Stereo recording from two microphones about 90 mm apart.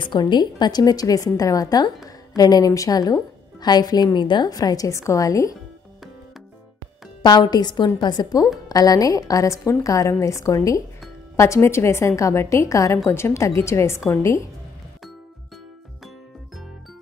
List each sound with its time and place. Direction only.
0.0 s a woman's voice: 60° left (ahead or behind)
4.5 s a woman's voice: 45° left (ahead or behind)
7.2 s a woman's voice: 50° left (ahead or behind); by 14.4 s 35° left (ahead or behind)